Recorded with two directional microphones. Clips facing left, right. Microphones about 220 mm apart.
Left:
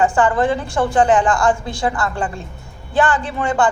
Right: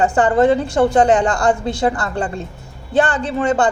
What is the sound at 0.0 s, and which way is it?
Speech, 40° right (ahead or behind).